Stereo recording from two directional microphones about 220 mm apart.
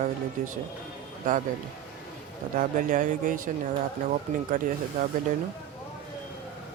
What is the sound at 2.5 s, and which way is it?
Speech, 35° right (ahead or behind).